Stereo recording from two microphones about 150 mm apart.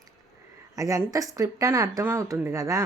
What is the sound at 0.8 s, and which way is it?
Speech, 20° right (ahead or behind).